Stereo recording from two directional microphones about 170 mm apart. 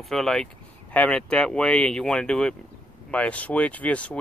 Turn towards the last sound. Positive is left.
turn(degrees=10)  # may be behind; listen again after turning